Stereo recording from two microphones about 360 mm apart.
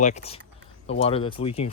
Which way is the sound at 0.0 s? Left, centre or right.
Centre.